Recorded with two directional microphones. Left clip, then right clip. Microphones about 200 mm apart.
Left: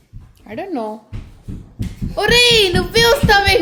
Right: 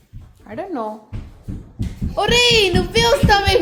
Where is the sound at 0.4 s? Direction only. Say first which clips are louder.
Left 2 dB; 25° left (ahead or behind).